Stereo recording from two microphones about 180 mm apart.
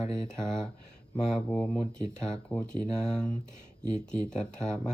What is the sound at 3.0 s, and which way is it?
Speech, 5° left (ahead or behind).